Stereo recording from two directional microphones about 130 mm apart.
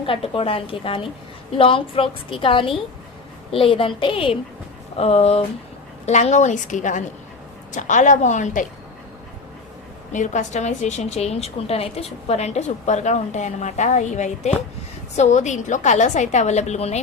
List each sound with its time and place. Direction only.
0.0 s a woman's voice: 45° left (ahead or behind)
6.1 s a woman's voice: 65° left (ahead or behind)
10.1 s a woman's voice: 70° left (ahead or behind)